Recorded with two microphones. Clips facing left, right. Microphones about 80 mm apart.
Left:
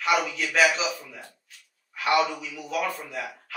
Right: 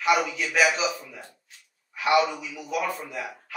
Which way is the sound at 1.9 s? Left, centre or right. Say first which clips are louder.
Right 1 dB; centre.